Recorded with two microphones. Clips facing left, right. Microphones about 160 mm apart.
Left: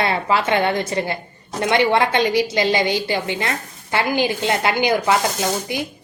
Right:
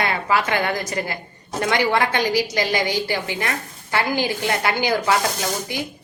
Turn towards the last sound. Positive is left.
turn(degrees=20)  # may be behind; listen again after turning